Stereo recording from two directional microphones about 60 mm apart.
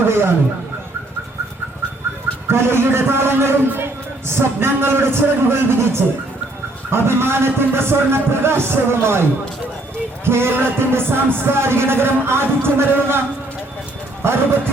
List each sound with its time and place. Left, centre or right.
0.0 s speech: right
2.5 s speech: right
10.2 s speech: right
14.2 s speech: right